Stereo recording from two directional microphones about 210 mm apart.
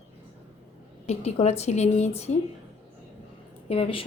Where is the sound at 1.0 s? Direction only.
30° left (ahead or behind).